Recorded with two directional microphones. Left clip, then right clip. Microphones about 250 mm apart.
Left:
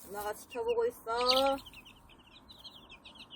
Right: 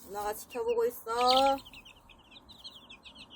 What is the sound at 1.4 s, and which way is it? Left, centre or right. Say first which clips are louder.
Chicken: right 3 dB; right.